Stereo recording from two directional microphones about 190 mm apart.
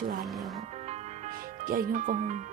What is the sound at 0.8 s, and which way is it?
Music, 35° right (ahead or behind).